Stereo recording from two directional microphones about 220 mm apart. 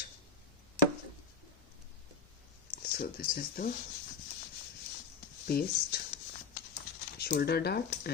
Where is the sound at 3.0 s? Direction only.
45° left (ahead or behind).